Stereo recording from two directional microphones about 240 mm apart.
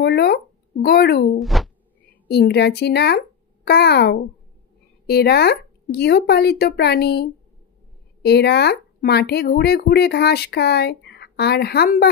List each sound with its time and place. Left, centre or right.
0.0 s speech: left
1.4 s a sound: centre
2.2 s a child's voice: left